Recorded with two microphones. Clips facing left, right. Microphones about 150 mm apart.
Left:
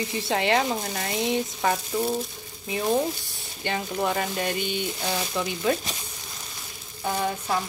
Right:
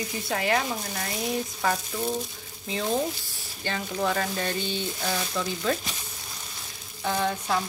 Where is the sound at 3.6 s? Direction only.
20° left (ahead or behind).